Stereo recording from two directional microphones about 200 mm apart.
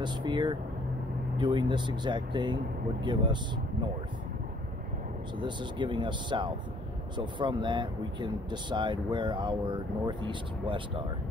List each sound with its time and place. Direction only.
0.0 s speech: 20° right (ahead or behind)
5.4 s speech: 25° right (ahead or behind)